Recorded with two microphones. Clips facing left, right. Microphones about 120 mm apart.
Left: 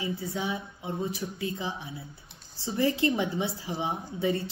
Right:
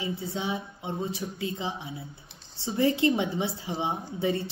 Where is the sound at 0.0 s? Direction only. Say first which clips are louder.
Even; 25° right (ahead or behind).